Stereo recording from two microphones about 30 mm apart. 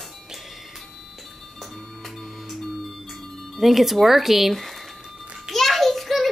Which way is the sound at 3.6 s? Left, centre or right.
Centre.